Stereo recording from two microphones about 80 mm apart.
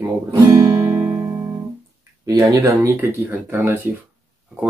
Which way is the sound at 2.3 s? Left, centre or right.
Right.